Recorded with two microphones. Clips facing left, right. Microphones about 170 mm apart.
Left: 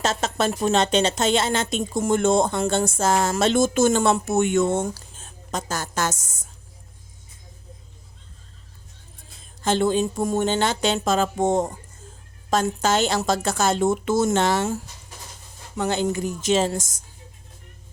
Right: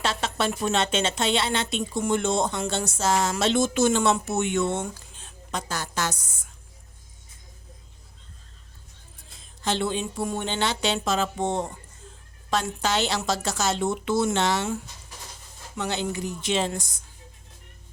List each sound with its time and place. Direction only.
0.0 s a woman's voice: 45° left (ahead or behind)
9.6 s a woman's voice: 45° left (ahead or behind)